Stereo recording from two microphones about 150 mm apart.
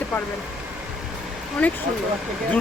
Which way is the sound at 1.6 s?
10° left (ahead or behind).